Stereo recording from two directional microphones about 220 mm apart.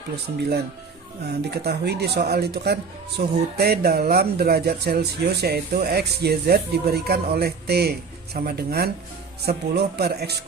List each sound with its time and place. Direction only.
1.3 s speech: 50° right (ahead or behind)